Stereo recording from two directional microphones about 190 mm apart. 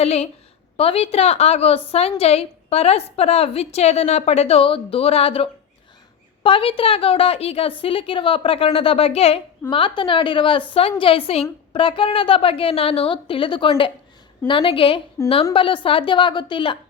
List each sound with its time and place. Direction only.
0.0 s a woman's voice: 35° left (ahead or behind)